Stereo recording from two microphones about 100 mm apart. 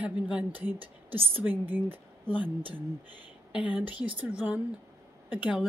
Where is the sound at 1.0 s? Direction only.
70° right (ahead or behind).